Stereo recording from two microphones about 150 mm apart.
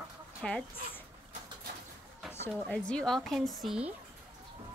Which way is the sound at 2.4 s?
5° left (ahead or behind).